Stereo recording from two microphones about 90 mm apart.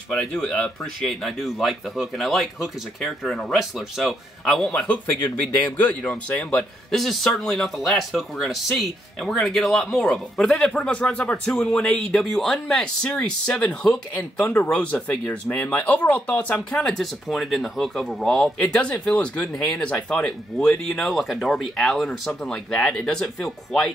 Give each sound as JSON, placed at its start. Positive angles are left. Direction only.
{"t": 0.1, "sound": "speech", "side_deg": 10}
{"t": 7.0, "sound": "speech", "side_deg": 0}
{"t": 16.7, "sound": "speech", "side_deg": 0}